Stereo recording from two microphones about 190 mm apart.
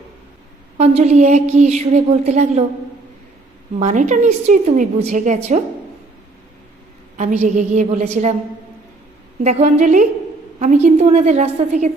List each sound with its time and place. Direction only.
0.8 s a woman's voice: 35° right (ahead or behind)
3.8 s a woman's voice: 40° right (ahead or behind)
7.2 s a woman's voice: 40° right (ahead or behind)
9.4 s a woman's voice: 35° right (ahead or behind)